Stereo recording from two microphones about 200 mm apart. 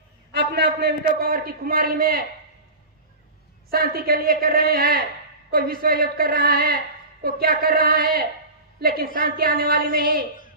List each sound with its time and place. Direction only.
0.3 s a man's voice: 55° right (ahead or behind)
3.7 s a man's voice: 50° right (ahead or behind)